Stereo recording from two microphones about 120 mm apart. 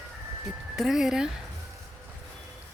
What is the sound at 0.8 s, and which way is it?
Speech, 5° right (ahead or behind).